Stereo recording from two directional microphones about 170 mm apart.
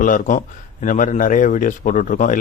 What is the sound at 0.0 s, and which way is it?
A man's voice, 50° left (ahead or behind).